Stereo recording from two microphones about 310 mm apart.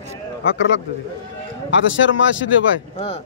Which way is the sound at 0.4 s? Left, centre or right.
Left.